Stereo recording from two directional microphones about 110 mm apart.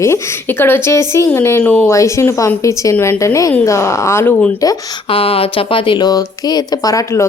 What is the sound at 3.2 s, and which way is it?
A woman's voice, 30° left (ahead or behind).